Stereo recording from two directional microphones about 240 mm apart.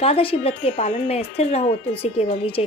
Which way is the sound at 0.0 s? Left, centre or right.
Left.